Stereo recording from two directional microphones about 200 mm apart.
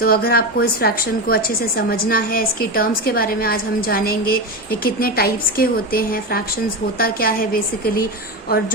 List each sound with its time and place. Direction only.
0.0 s a woman's voice: 50° left (ahead or behind)